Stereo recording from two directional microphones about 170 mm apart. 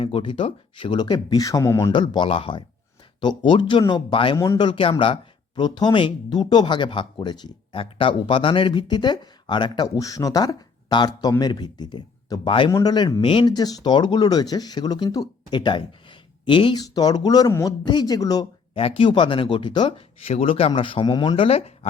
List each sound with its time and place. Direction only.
0.0 s speech: 30° left (ahead or behind)
1.9 s speech: 25° left (ahead or behind)
18.8 s speech: 35° left (ahead or behind)